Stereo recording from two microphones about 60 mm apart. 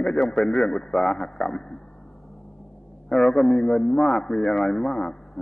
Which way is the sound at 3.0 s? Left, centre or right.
Centre.